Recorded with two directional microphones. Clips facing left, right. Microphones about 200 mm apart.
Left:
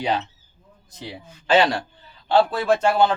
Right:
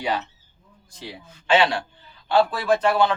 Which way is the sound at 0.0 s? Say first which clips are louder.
Left 2 dB; 25° left (ahead or behind).